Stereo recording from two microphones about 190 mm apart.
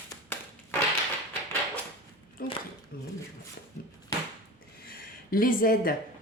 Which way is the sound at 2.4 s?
50° left (ahead or behind).